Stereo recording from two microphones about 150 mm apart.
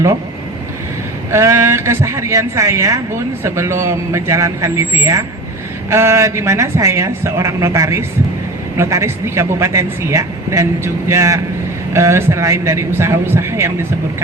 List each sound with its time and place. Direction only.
1.3 s speech: 20° right (ahead or behind)